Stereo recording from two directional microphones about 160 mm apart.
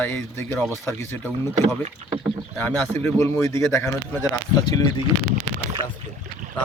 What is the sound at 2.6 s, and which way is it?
Speech, 15° left (ahead or behind).